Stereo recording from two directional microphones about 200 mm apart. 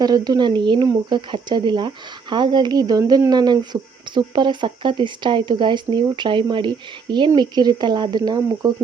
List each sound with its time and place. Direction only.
0.0 s speech: 20° right (ahead or behind)